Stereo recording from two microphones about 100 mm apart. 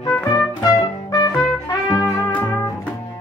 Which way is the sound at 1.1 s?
40° left (ahead or behind).